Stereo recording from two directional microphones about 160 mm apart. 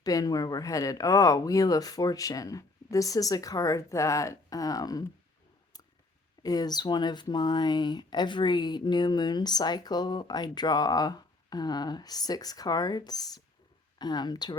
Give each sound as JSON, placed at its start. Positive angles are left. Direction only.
{"t": 0.0, "sound": "speech", "side_deg": 20}
{"t": 6.4, "sound": "speech", "side_deg": 25}